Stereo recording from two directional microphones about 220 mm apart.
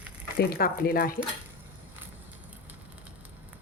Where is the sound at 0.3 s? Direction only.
45° left (ahead or behind).